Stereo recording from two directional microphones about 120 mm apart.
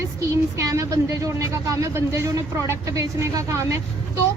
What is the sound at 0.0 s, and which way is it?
A woman's voice, 25° right (ahead or behind).